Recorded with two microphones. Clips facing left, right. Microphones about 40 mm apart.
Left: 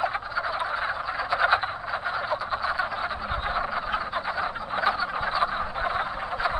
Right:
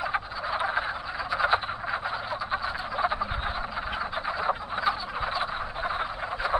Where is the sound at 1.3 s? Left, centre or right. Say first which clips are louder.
Left 2 dB; left.